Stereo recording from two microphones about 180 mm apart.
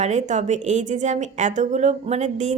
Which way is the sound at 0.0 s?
40° right (ahead or behind).